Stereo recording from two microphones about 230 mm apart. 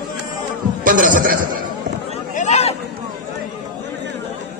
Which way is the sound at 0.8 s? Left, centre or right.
Right.